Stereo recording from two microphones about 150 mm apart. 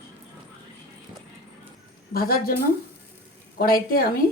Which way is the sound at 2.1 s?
80° left.